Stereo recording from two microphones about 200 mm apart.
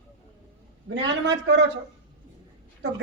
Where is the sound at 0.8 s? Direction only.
60° right (ahead or behind).